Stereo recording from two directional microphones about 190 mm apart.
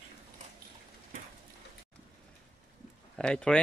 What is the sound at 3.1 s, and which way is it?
Speech, 5° left (ahead or behind).